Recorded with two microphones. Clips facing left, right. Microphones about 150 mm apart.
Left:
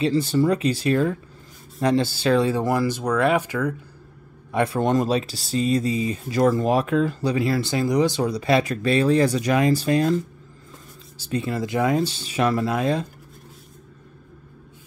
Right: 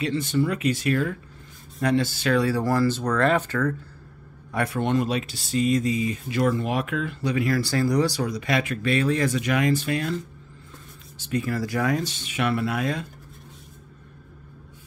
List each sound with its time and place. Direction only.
0.0 s speech: 35° left (ahead or behind); by 3.7 s 10° left (ahead or behind)
4.5 s a man's voice: 20° left (ahead or behind)
4.7 s speech: 35° left (ahead or behind)